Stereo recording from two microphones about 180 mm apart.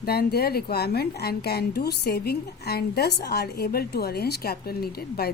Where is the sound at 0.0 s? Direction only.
60° left (ahead or behind).